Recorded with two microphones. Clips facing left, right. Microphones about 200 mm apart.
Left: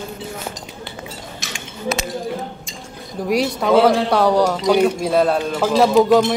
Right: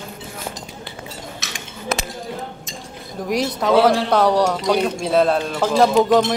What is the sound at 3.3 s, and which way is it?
Speech, 5° left (ahead or behind).